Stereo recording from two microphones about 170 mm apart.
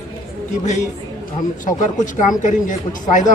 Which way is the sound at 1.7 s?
50° left (ahead or behind).